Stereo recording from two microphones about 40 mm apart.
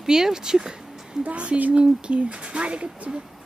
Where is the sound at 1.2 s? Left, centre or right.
Right.